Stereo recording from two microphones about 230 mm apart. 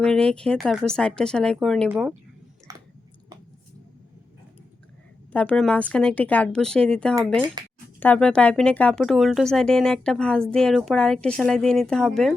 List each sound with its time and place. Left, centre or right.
0.0 s speech: centre
2.7 s chewing: centre
5.3 s speech: centre
7.6 s speech: centre
7.9 s speech: centre